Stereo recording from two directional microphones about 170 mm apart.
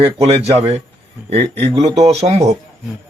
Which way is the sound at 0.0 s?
35° right (ahead or behind).